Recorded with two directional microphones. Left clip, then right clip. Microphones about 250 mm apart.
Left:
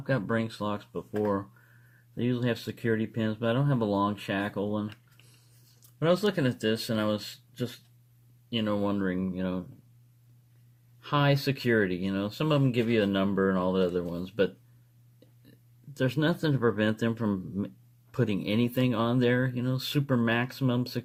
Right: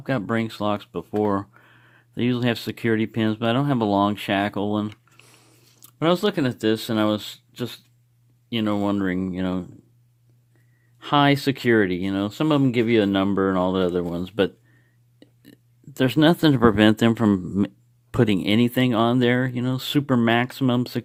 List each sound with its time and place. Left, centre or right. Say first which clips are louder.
0.0 s speech: right 5 dB; right
2.1 s speech: right 7 dB; right
6.0 s speech: right 5 dB; right
11.0 s speech: right 8 dB; right
16.0 s speech: right 10 dB; right